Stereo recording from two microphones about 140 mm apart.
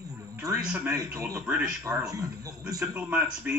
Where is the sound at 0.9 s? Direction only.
20° right (ahead or behind).